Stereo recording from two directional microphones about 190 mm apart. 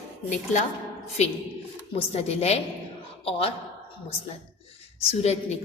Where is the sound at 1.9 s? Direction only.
30° left (ahead or behind).